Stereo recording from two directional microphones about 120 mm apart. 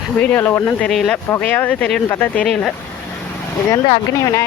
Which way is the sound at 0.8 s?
5° left (ahead or behind).